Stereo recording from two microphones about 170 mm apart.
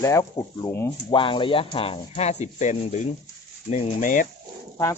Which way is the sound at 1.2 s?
30° left (ahead or behind).